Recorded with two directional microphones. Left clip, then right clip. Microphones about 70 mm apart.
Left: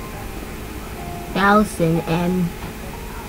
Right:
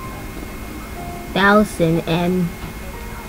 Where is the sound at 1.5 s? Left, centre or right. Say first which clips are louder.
Right 2 dB; centre.